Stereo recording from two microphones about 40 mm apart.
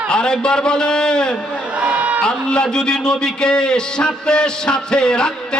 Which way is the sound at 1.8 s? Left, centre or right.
Right.